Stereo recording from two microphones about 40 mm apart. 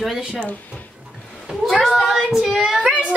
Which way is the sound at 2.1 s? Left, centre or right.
Centre.